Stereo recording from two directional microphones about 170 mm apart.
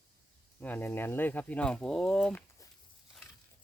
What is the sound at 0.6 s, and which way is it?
Speech, 10° left (ahead or behind).